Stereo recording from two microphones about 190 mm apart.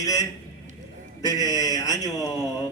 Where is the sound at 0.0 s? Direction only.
20° left (ahead or behind).